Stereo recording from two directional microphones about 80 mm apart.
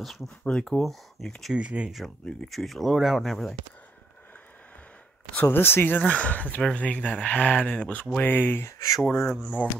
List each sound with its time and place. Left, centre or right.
0.0 s speech: centre
1.5 s speech: centre
2.0 s speech: centre
5.3 s speech: left
8.6 s speech: left